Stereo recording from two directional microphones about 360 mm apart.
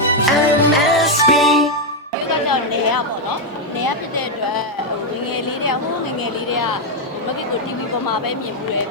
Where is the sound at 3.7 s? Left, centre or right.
Left.